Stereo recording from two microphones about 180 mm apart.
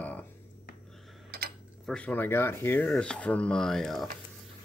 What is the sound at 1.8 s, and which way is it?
Speech, 5° left (ahead or behind).